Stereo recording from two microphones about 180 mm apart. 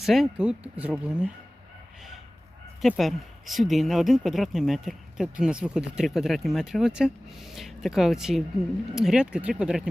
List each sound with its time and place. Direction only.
0.0 s speech: centre (ahead or behind)
2.8 s speech: centre (ahead or behind)